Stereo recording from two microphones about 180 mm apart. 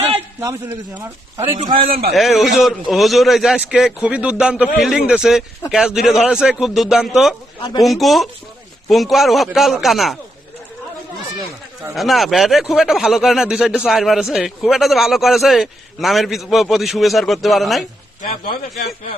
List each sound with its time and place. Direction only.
0.3 s a man's voice: 15° right (ahead or behind)
1.6 s a man's voice: 30° right (ahead or behind)
2.1 s speech: centre (ahead or behind)
11.9 s speech: centre (ahead or behind)